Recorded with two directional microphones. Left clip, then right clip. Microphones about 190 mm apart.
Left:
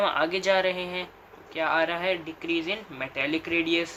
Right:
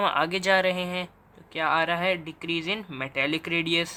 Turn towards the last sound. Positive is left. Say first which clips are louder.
# even
turn(degrees=-35)  # may be behind; listen again after turning